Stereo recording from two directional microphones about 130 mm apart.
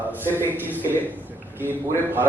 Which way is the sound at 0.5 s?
15° right (ahead or behind).